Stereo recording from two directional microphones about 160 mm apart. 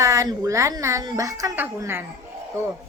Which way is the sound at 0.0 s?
20° right (ahead or behind).